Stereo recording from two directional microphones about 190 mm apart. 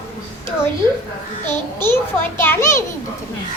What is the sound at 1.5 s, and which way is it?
A child's voice, 10° left (ahead or behind).